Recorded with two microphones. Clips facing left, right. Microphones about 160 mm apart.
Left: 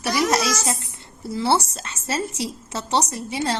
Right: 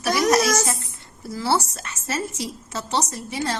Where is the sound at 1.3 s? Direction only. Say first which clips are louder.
Left 2 dB; 25° left (ahead or behind).